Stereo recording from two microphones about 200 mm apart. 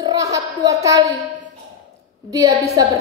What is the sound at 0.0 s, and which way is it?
A woman's voice, 20° right (ahead or behind).